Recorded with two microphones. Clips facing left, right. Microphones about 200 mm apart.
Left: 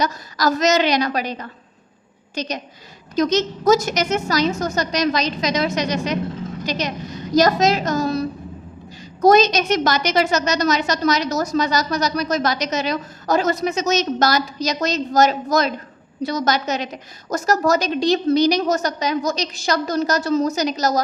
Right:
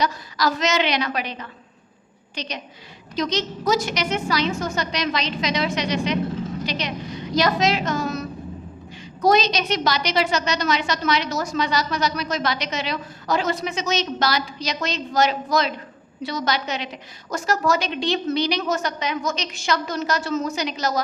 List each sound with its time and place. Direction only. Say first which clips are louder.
0.0 s a woman's voice: left 2 dB; 45° left (ahead or behind)
9.2 s a woman's voice: left 5 dB; 45° left (ahead or behind)